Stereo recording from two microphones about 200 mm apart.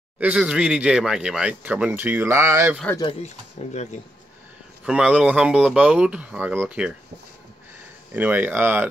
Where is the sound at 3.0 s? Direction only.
25° left (ahead or behind).